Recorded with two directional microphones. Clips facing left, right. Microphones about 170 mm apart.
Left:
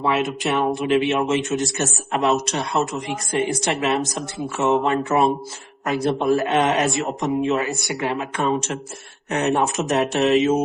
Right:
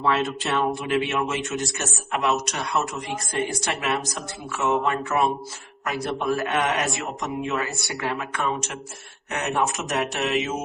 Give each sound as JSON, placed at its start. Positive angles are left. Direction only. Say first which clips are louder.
{"t": 0.0, "sound": "a man's voice", "louder": "left 2 dB", "side_deg": 15}